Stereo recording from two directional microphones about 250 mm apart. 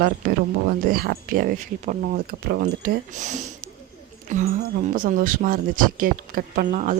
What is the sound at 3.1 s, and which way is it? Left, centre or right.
Speech, right.